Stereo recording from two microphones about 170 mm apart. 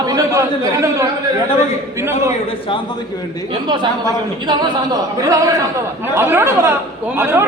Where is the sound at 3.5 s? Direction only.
25° right (ahead or behind).